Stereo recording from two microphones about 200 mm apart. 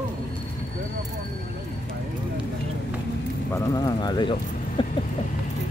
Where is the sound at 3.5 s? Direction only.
20° left (ahead or behind).